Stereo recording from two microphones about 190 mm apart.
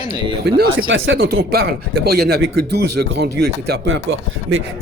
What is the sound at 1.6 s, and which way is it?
Speech, 55° right (ahead or behind).